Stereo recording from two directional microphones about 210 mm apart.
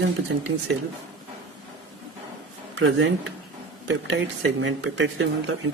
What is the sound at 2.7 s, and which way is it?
Speech, 60° right (ahead or behind).